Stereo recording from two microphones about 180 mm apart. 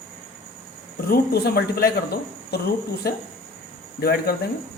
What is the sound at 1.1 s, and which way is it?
Speech, 60° left (ahead or behind).